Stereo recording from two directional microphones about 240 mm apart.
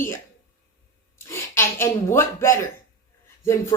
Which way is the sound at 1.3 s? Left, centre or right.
Centre.